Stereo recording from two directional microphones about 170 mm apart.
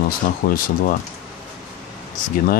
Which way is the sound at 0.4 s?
65° left (ahead or behind).